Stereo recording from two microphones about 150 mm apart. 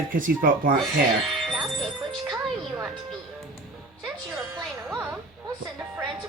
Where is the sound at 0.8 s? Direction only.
Centre (ahead or behind).